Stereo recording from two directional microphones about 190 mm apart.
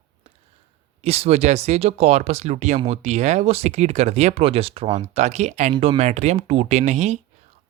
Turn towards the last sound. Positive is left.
turn(degrees=-40)  # may be behind; listen again after turning